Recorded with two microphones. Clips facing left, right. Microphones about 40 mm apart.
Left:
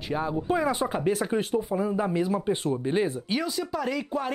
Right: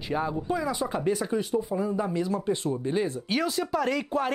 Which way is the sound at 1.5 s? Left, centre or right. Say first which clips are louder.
Left 1 dB; centre.